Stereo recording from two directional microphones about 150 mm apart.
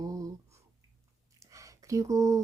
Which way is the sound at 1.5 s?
20° right (ahead or behind).